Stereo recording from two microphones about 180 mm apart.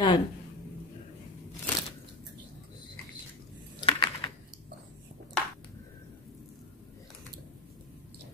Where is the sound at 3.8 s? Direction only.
25° left (ahead or behind).